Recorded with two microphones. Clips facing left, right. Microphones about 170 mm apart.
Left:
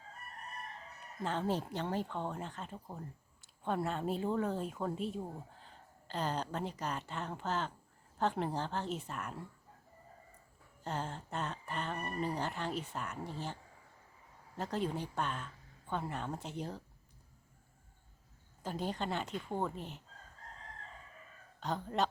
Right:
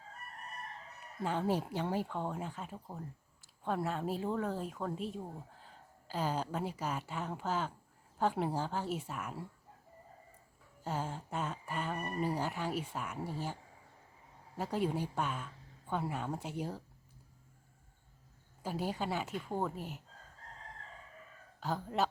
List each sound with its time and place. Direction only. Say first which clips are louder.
1.2 s speech: right 2 dB; 10° right (ahead or behind)
10.8 s speech: right 1 dB; 10° right (ahead or behind)
18.6 s speech: right 1 dB; 10° right (ahead or behind)
21.6 s speech: even; 5° right (ahead or behind)